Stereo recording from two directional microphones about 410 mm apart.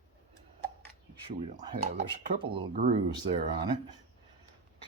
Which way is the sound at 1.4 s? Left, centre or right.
Centre.